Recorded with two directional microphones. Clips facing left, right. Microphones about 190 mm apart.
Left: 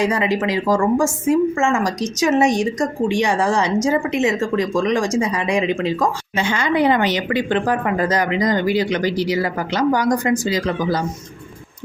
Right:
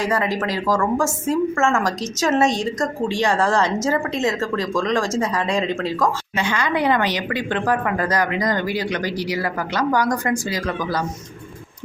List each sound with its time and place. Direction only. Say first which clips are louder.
0.0 s a woman's voice: left 3 dB; 20° left (ahead or behind)